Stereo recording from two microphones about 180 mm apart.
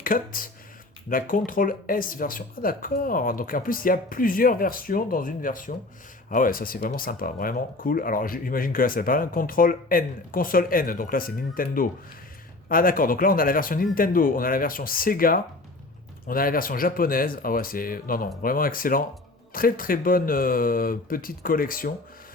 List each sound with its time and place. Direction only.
0.0 s speech: 50° left (ahead or behind)